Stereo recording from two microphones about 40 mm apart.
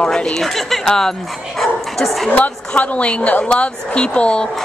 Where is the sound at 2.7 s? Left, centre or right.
Left.